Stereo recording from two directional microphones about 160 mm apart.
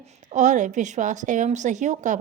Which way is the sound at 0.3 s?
50° right (ahead or behind).